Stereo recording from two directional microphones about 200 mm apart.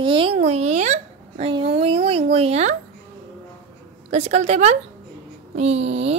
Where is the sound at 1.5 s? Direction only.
25° right (ahead or behind).